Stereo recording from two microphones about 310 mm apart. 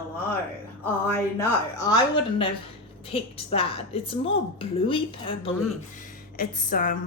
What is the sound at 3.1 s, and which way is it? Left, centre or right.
A woman's voice, centre.